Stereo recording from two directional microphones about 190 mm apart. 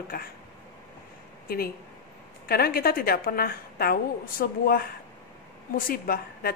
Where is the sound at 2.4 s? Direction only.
55° left (ahead or behind).